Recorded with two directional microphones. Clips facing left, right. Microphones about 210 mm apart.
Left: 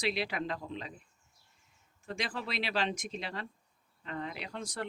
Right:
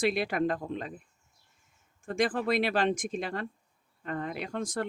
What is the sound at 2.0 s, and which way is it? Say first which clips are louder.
Speech: right 10 dB; 50° right (ahead or behind).